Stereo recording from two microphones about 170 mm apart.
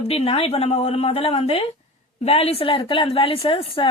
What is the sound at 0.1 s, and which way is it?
A woman's voice, 40° left (ahead or behind).